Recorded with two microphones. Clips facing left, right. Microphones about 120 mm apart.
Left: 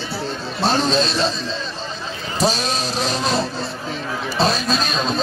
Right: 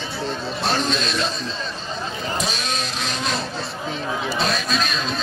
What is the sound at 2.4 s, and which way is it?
Speech, 35° left (ahead or behind).